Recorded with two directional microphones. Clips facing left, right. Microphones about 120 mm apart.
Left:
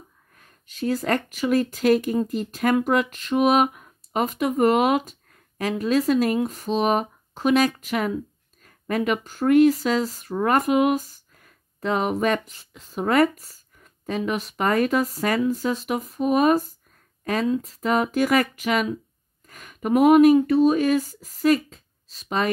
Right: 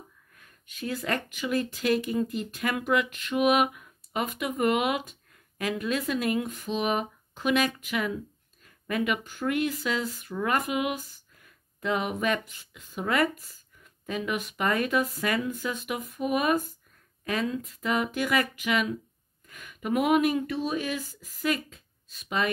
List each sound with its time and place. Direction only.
0.3 s speech: 35° left (ahead or behind)